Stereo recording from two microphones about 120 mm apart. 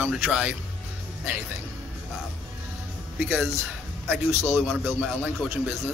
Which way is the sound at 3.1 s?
15° right (ahead or behind).